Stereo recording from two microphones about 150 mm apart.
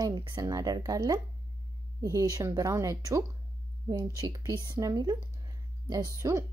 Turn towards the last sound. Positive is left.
turn(degrees=-20)  # may be behind; listen again after turning